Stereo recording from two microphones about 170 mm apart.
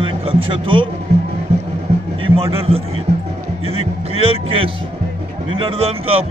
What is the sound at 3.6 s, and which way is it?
Music, 35° right (ahead or behind).